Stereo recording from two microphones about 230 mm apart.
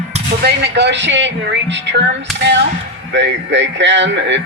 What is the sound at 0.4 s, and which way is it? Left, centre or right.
Speech, right.